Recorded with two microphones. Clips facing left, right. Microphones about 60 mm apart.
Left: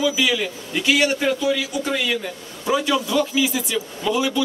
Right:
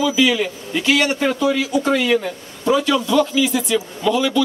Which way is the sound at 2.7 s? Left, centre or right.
Centre.